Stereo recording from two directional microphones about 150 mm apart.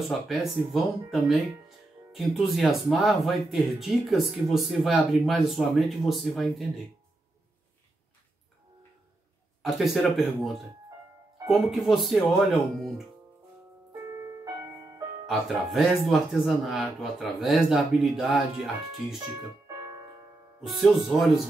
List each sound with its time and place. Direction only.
0.3 s speech: centre (ahead or behind)
9.6 s speech: centre (ahead or behind)
15.2 s speech: centre (ahead or behind)
20.6 s speech: centre (ahead or behind)